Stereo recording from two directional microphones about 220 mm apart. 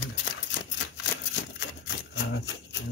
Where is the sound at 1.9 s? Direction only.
55° left (ahead or behind).